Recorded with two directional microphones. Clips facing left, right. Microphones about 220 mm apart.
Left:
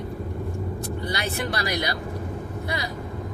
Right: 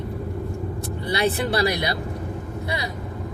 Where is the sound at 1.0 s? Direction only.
30° right (ahead or behind).